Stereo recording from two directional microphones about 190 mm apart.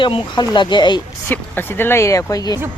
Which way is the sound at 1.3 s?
10° left (ahead or behind).